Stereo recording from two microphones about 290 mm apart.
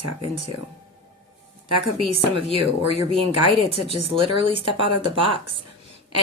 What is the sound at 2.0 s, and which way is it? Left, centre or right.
Speech, centre.